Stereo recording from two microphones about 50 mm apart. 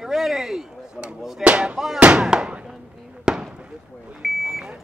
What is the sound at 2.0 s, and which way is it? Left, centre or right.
Speech, centre.